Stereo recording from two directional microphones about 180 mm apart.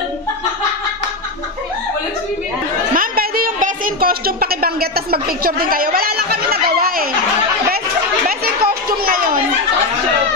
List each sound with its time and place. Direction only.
2.9 s a woman's voice: 55° right (ahead or behind)
9.0 s children playing: 55° right (ahead or behind)